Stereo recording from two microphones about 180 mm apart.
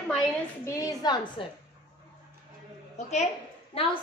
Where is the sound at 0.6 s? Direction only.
20° left (ahead or behind).